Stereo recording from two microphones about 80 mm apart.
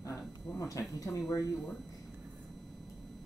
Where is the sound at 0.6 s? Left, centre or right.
Left.